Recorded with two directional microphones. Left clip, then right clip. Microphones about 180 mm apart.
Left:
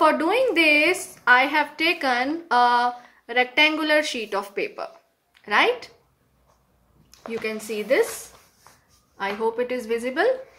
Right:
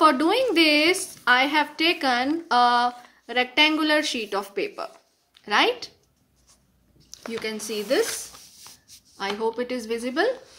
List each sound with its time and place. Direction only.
0.0 s a woman's voice: 25° right (ahead or behind)
7.6 s a woman's voice: 20° right (ahead or behind)
9.1 s a woman's voice: 20° right (ahead or behind)